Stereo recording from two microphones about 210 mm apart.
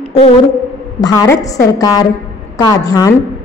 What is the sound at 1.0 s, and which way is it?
A woman's voice, 15° left (ahead or behind).